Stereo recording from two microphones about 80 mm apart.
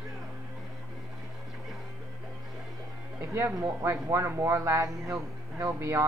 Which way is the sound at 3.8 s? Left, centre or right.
Right.